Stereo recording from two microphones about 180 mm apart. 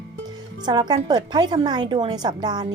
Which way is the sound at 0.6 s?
25° right (ahead or behind).